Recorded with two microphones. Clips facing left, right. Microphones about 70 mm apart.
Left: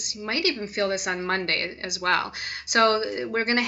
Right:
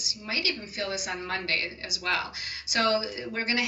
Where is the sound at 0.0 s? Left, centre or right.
Left.